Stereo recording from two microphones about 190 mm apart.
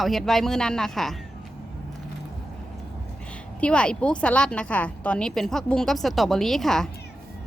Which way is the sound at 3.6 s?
5° left (ahead or behind).